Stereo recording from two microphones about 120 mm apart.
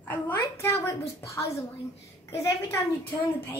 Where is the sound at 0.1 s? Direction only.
15° left (ahead or behind).